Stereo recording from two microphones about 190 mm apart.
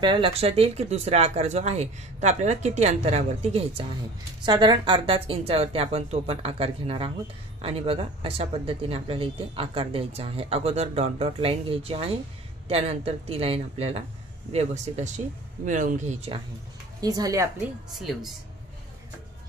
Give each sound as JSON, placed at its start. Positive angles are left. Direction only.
{"t": 0.0, "sound": "speech", "side_deg": -25}
{"t": 4.5, "sound": "speech", "side_deg": -25}
{"t": 17.0, "sound": "a woman's voice", "side_deg": -20}
{"t": 17.9, "sound": "speech", "side_deg": 0}